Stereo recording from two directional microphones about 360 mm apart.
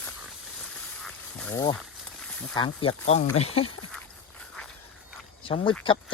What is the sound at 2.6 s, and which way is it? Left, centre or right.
A man's voice, centre.